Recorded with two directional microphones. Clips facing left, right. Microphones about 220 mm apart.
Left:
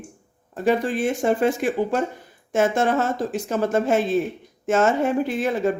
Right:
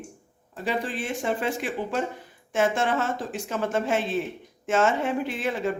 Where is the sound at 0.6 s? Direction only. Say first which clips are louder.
Left 8 dB; 45° left (ahead or behind).